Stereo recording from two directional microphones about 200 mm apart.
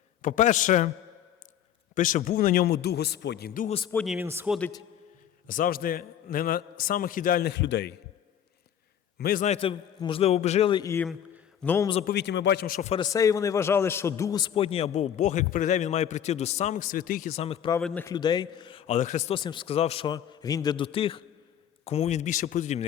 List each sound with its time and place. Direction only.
0.2 s a man's voice: 40° left (ahead or behind)
2.0 s a man's voice: 40° left (ahead or behind)
3.9 s speech: centre (ahead or behind)
5.5 s a man's voice: 45° left (ahead or behind)
9.1 s a man's voice: 45° left (ahead or behind)
9.5 s a man's voice: 30° left (ahead or behind)
10.9 s a man's voice: 5° left (ahead or behind)
12.0 s a man's voice: 55° left (ahead or behind)
12.9 s a man's voice: 20° left (ahead or behind)
17.7 s speech: 5° left (ahead or behind)
18.0 s a man's voice: 20° left (ahead or behind)
20.1 s a man's voice: 20° left (ahead or behind); by 22.9 s 35° left (ahead or behind)